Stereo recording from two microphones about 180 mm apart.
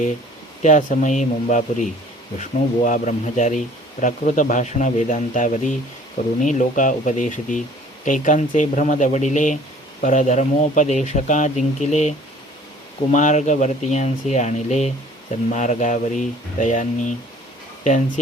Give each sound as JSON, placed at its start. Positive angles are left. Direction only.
{"t": 0.6, "sound": "speech", "side_deg": 45}